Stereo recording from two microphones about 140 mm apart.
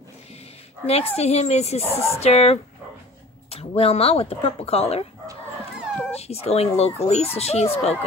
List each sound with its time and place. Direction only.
0.8 s speech: 45° left (ahead or behind)
6.1 s speech: 50° left (ahead or behind)